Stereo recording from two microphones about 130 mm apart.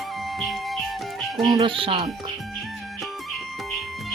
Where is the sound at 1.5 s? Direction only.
40° right (ahead or behind).